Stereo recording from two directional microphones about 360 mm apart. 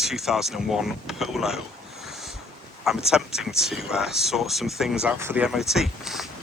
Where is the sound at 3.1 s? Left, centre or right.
Centre.